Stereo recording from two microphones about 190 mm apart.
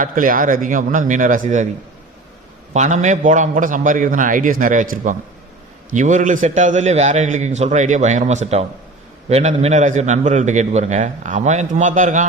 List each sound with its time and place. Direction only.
0.0 s a man's voice: 45° right (ahead or behind)
2.7 s a man's voice: 40° right (ahead or behind)